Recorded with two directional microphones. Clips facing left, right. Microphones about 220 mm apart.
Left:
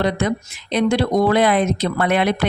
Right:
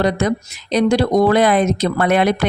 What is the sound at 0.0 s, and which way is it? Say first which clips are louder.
Speech: right 3 dB; 40° right (ahead or behind).